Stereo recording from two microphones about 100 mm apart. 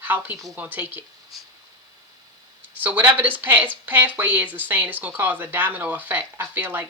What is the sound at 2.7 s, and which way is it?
Speech, 20° right (ahead or behind).